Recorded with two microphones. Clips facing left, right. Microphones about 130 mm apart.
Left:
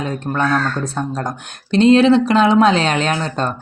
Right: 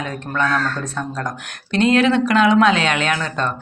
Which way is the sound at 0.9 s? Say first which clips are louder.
Left 3 dB; 30° left (ahead or behind).